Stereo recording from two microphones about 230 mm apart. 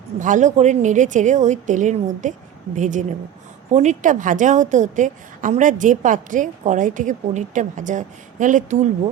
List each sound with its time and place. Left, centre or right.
0.2 s a woman's voice: right